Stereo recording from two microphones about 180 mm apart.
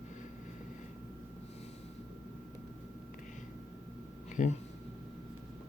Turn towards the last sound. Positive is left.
turn(degrees=45)  # may be behind; listen again after turning